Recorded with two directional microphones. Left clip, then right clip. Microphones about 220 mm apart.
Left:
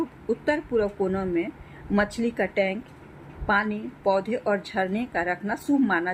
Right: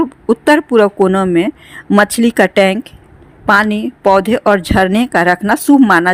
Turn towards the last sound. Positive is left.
turn(degrees=-55)  # may be behind; listen again after turning